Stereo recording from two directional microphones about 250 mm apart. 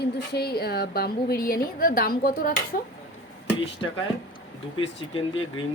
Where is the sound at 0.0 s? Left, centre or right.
Left.